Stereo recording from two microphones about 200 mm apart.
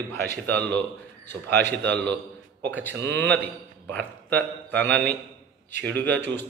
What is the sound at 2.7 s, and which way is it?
A man's voice, 10° left (ahead or behind).